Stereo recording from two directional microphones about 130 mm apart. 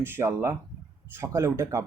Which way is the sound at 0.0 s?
20° right (ahead or behind).